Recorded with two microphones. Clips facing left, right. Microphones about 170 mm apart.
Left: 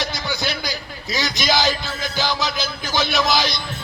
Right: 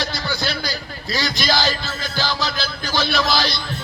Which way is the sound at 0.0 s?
20° left (ahead or behind).